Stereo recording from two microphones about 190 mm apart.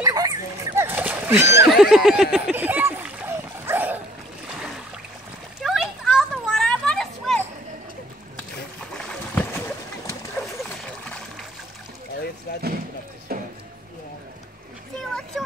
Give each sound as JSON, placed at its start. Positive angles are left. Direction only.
{"t": 0.0, "sound": "dog", "side_deg": -20}
{"t": 1.7, "sound": "snicker", "side_deg": 0}
{"t": 2.3, "sound": "dog", "side_deg": -5}
{"t": 5.6, "sound": "children playing", "side_deg": 0}
{"t": 8.9, "sound": "boat", "side_deg": 10}
{"t": 13.3, "sound": "a sound", "side_deg": -55}
{"t": 15.0, "sound": "vehicle", "side_deg": 0}